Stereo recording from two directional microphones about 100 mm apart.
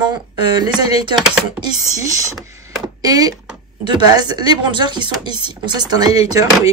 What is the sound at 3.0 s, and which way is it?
Speech, 40° right (ahead or behind).